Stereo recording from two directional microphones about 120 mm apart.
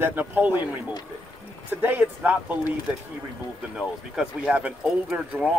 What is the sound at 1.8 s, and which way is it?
Speech, 15° right (ahead or behind).